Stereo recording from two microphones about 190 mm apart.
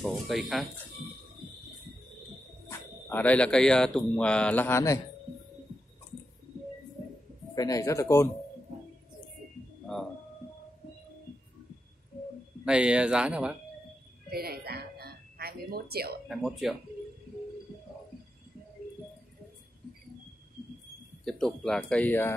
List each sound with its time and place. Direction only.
0.0 s a man's voice: centre (ahead or behind)
3.1 s a man's voice: 5° left (ahead or behind)
7.5 s speech: 20° left (ahead or behind)
12.6 s a man's voice: 5° right (ahead or behind)
14.3 s music: 55° right (ahead or behind)
16.3 s a man's voice: centre (ahead or behind)
21.2 s a man's voice: centre (ahead or behind)